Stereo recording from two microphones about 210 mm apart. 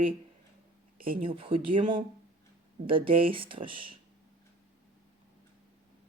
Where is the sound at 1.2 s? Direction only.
25° right (ahead or behind).